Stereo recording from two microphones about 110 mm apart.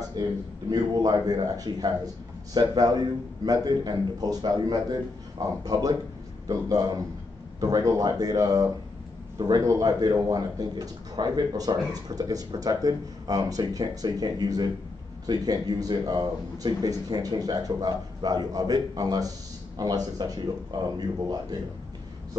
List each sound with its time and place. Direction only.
0.2 s a man's voice: 40° right (ahead or behind)